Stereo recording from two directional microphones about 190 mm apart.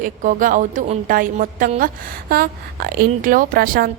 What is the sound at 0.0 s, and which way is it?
A woman's voice, 45° right (ahead or behind).